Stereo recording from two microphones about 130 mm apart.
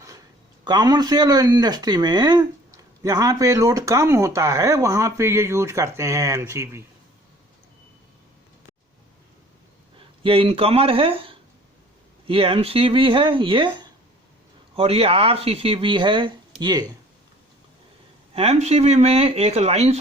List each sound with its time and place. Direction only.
0.6 s speech: 30° right (ahead or behind)
10.2 s speech: 45° right (ahead or behind)
14.8 s speech: 50° right (ahead or behind)
18.3 s speech: 50° right (ahead or behind)